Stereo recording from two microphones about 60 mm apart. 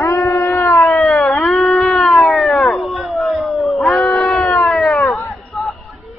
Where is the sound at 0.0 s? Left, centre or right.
Left.